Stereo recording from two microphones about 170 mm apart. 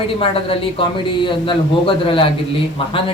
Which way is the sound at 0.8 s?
30° left (ahead or behind).